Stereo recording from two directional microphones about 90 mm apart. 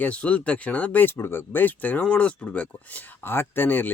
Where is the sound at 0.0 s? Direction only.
15° left (ahead or behind).